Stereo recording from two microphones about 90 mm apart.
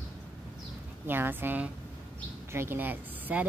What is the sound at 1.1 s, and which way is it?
Speech, 25° right (ahead or behind).